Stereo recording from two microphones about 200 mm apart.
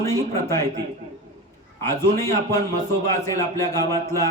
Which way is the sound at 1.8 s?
15° left (ahead or behind).